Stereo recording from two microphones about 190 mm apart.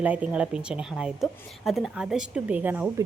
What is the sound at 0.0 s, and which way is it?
Speech, 10° right (ahead or behind).